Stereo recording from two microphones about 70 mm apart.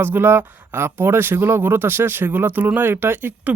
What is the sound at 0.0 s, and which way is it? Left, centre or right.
Speech, right.